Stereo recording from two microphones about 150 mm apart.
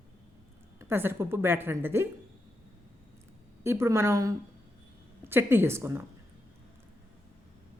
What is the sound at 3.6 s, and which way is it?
A woman's voice, 20° right (ahead or behind).